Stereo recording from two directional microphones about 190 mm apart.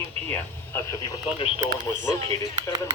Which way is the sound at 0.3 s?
15° left (ahead or behind).